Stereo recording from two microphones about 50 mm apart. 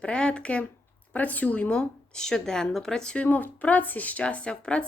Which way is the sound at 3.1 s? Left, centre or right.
Left.